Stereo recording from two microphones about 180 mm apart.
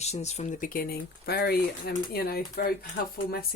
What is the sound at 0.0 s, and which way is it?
Speech, 40° left (ahead or behind).